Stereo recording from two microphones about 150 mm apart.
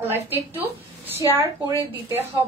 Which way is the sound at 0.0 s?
15° right (ahead or behind).